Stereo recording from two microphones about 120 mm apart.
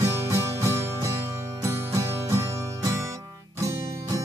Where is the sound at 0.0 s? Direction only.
25° right (ahead or behind).